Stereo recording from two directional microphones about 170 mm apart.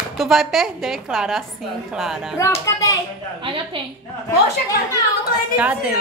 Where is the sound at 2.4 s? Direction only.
20° left (ahead or behind).